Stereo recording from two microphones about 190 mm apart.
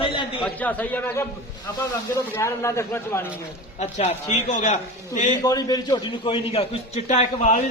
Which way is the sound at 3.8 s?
35° left (ahead or behind).